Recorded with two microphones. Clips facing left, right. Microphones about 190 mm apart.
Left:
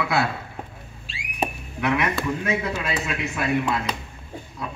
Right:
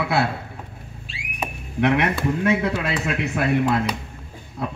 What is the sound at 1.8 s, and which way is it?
Speech, 55° right (ahead or behind).